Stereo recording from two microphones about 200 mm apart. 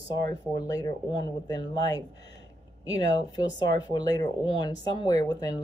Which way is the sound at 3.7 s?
20° left (ahead or behind).